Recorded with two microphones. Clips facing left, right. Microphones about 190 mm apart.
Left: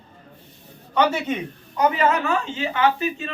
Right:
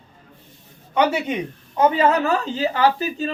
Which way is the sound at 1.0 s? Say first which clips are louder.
Right 1 dB; 10° right (ahead or behind).